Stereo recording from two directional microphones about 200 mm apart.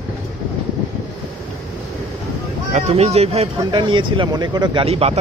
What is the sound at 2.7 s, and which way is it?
Speech, 30° right (ahead or behind).